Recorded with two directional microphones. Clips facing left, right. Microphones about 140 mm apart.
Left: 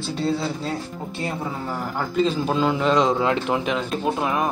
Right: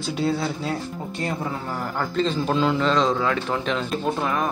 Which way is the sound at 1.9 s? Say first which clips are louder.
Left 2 dB; 10° left (ahead or behind).